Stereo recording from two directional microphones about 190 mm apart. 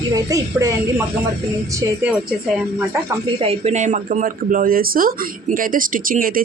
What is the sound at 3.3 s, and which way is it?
Speech, 35° right (ahead or behind).